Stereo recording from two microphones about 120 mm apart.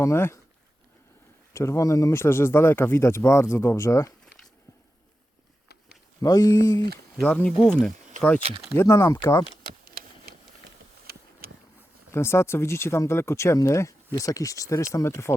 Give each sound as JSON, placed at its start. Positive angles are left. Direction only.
{"t": 0.0, "sound": "speech", "side_deg": 20}
{"t": 1.5, "sound": "speech", "side_deg": 25}
{"t": 6.2, "sound": "speech", "side_deg": 25}
{"t": 7.3, "sound": "speech", "side_deg": 10}
{"t": 8.4, "sound": "speech", "side_deg": -55}
{"t": 8.7, "sound": "speech", "side_deg": 25}
{"t": 12.1, "sound": "speech", "side_deg": 20}